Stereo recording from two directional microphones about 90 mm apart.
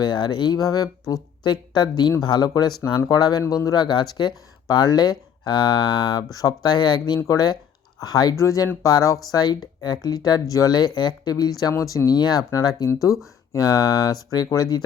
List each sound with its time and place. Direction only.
0.0 s speech: 55° left (ahead or behind)
3.4 s speech: 40° left (ahead or behind)
11.7 s speech: 35° left (ahead or behind)
13.5 s speech: 45° left (ahead or behind)